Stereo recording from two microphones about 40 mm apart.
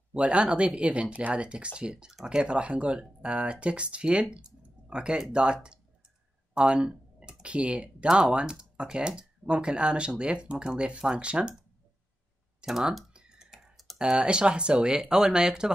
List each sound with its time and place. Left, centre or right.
0.1 s speech: right
6.5 s a sound: right
7.4 s speech: right
12.6 s speech: right
13.1 s computer keyboard: right
13.9 s speech: right